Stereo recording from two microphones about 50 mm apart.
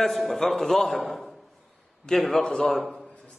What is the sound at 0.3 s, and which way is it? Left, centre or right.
Speech, centre.